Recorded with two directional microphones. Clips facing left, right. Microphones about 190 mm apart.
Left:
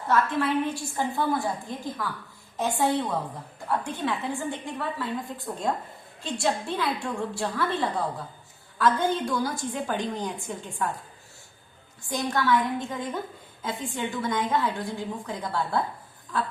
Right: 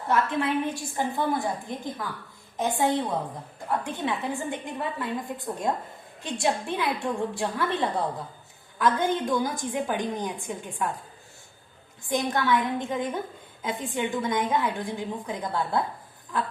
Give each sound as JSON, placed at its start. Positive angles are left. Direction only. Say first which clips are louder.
{"t": 0.1, "sound": "a woman's voice", "louder": "left 1 dB", "side_deg": -20}
{"t": 12.0, "sound": "a woman's voice", "louder": "right 1 dB", "side_deg": -20}